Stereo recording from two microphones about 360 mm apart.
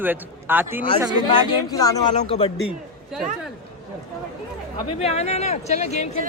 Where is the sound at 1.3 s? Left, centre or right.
Centre.